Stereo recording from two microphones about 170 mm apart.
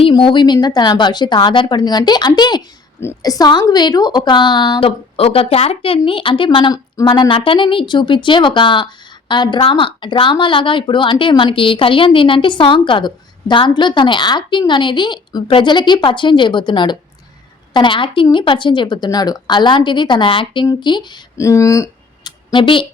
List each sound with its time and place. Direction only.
0.0 s a woman's voice: 30° left (ahead or behind)